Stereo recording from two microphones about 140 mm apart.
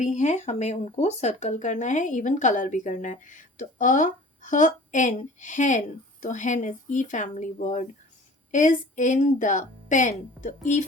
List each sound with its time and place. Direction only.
0.0 s speech: 55° left (ahead or behind)